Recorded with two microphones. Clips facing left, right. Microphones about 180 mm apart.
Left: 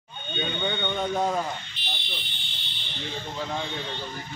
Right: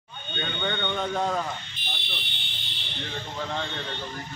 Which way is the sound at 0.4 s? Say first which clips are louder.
Left 1 dB; 10° left (ahead or behind).